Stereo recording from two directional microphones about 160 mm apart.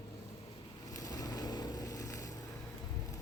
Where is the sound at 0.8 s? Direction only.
20° left (ahead or behind).